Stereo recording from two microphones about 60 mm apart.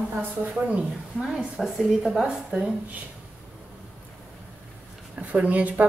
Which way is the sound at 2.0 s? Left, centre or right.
Centre.